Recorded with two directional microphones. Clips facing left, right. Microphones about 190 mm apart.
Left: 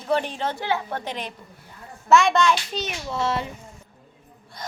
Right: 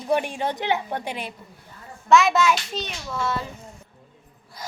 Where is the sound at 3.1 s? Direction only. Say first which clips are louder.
Left 2 dB; 25° left (ahead or behind).